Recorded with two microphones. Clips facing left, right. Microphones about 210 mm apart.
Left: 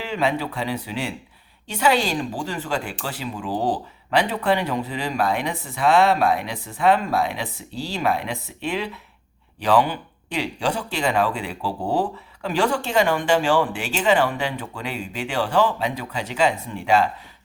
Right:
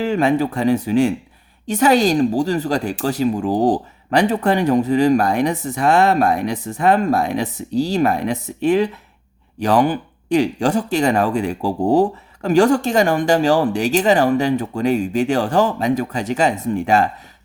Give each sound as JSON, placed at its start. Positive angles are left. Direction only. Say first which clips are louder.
{"t": 0.0, "sound": "speech", "louder": "right 7 dB", "side_deg": -45}